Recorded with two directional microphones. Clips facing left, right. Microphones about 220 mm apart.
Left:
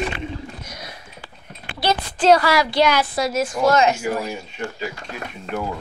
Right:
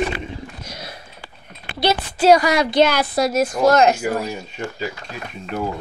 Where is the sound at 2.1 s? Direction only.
10° right (ahead or behind).